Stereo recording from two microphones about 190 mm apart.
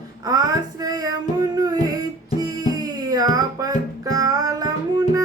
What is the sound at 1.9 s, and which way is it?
Music, 20° right (ahead or behind).